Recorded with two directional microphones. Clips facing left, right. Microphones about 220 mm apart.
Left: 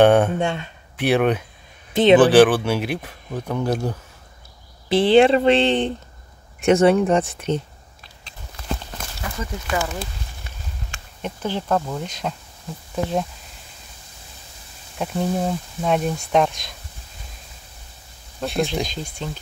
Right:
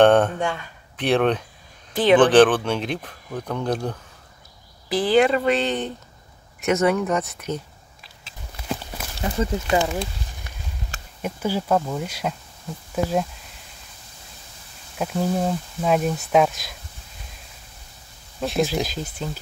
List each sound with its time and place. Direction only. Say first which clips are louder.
0.0 s speech: left 1 dB; 10° left (ahead or behind)
0.4 s speech: left 3 dB; 25° left (ahead or behind)
0.9 s speech: left 1 dB; 10° left (ahead or behind)
4.8 s speech: left 4 dB; 25° left (ahead or behind)
8.0 s a sound: left 2 dB; centre (ahead or behind)
8.5 s clip-clop: even; 5° right (ahead or behind)
9.2 s speech: right 7 dB; 20° right (ahead or behind)
11.2 s speech: right 1 dB; 10° right (ahead or behind)
15.0 s speech: even; centre (ahead or behind)
18.4 s speech: right 1 dB; centre (ahead or behind)